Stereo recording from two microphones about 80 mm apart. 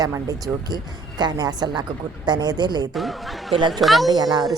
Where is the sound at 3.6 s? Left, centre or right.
Right.